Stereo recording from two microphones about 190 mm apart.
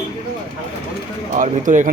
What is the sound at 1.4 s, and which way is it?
Speech, 45° right (ahead or behind).